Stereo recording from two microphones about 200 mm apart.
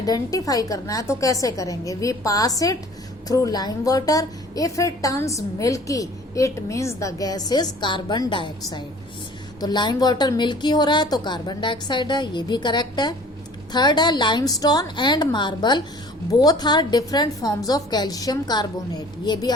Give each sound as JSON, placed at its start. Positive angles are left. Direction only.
{"t": 0.0, "sound": "a woman's voice", "side_deg": 20}